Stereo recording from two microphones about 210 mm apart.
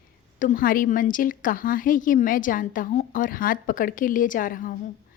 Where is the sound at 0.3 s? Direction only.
40° left (ahead or behind).